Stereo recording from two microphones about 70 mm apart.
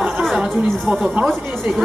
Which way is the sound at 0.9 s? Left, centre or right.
Centre.